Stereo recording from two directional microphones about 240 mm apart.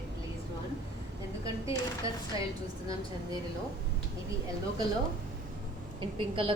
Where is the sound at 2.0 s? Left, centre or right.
Centre.